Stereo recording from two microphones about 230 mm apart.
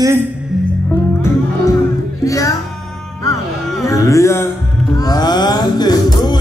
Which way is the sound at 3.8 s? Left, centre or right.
Centre.